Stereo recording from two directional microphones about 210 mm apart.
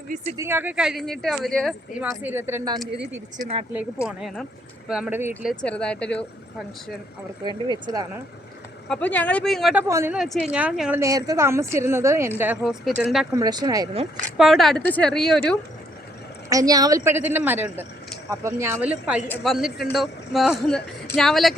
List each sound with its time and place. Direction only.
0.3 s speech: 10° right (ahead or behind)
2.0 s speech: 10° right (ahead or behind)
4.0 s speech: centre (ahead or behind)
5.6 s speech: 5° left (ahead or behind)
7.9 s speech: 20° right (ahead or behind)
8.9 s speech: 5° left (ahead or behind)
9.8 s speech: 15° right (ahead or behind)
13.3 s speech: 20° right (ahead or behind)
14.3 s speech: centre (ahead or behind)
16.5 s speech: 15° right (ahead or behind); by 21.5 s centre (ahead or behind)